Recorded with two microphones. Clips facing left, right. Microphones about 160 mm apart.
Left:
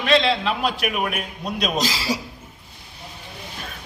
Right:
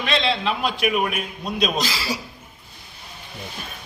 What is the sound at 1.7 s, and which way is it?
Speech, 35° left (ahead or behind).